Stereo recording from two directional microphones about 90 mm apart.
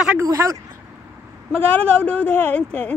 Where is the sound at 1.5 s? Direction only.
15° left (ahead or behind).